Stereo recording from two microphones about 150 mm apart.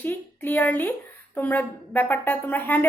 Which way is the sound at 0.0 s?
15° left (ahead or behind).